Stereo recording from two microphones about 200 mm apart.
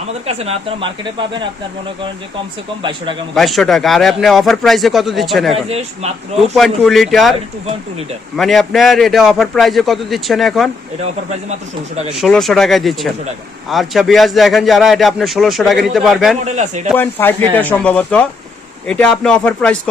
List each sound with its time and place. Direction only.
0.3 s speech: 30° right (ahead or behind)
3.3 s a man's voice: centre (ahead or behind)
5.6 s a man's voice: 30° right (ahead or behind)
6.6 s a man's voice: centre (ahead or behind)
8.4 s a man's voice: centre (ahead or behind)
12.1 s a man's voice: centre (ahead or behind)
16.5 s a man's voice: 35° right (ahead or behind)
16.9 s a man's voice: 10° left (ahead or behind)